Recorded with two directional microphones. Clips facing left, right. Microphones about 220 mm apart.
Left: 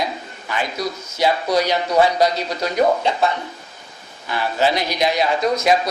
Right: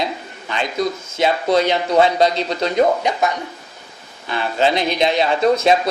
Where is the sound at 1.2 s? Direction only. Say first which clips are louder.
Right 2 dB; 25° right (ahead or behind).